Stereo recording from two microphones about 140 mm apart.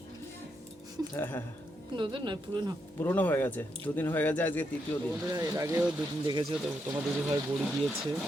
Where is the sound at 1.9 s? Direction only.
35° right (ahead or behind).